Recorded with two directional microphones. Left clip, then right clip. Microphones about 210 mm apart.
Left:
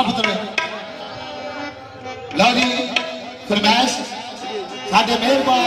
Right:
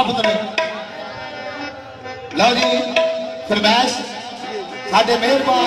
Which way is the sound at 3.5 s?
40° left (ahead or behind).